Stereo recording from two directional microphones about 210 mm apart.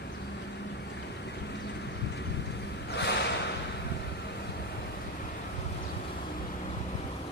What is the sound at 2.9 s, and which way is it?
Snort, 55° left (ahead or behind).